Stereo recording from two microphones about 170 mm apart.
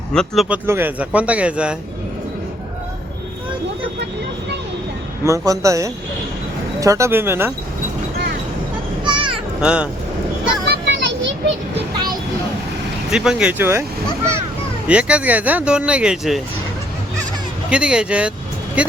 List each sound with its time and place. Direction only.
0.1 s speech: 5° left (ahead or behind)
0.4 s speech: 10° right (ahead or behind)
5.2 s a man's voice: 20° right (ahead or behind)
9.0 s a sound: 30° right (ahead or behind)
9.6 s speech: 5° right (ahead or behind)
10.8 s children playing: 90° right
13.1 s speech: 5° right (ahead or behind)
14.8 s speech: 5° right (ahead or behind)
17.7 s speech: 5° right (ahead or behind)